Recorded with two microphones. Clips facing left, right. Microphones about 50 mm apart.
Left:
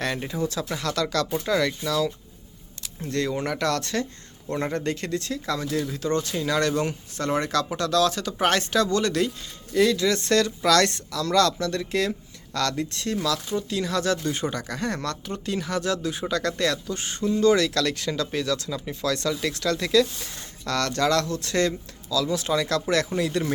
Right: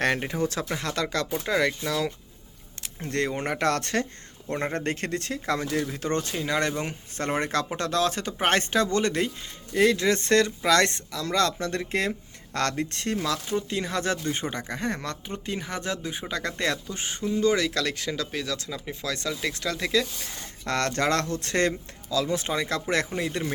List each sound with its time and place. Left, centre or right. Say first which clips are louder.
0.0 s speech: right 2 dB; right
0.7 s speech: left 2 dB; right
6.3 s speech: left 3 dB; right
7.2 s speech: left 2 dB; right
16.8 s speech: left 4 dB; centre
20.7 s speech: left 1 dB; right